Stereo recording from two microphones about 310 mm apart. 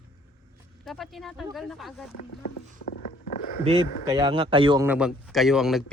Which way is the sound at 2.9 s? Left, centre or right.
Left.